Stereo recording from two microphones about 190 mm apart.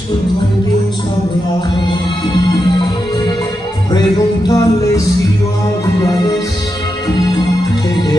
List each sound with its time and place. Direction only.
3.9 s music: 20° left (ahead or behind)
6.0 s music: 20° left (ahead or behind)